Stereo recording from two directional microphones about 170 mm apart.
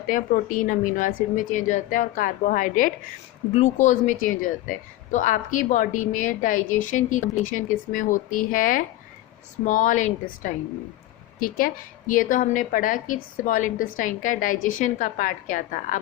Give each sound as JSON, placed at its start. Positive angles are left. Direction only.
{"t": 0.1, "sound": "a woman's voice", "side_deg": 55}